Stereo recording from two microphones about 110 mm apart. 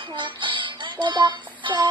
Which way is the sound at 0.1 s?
45° right (ahead or behind).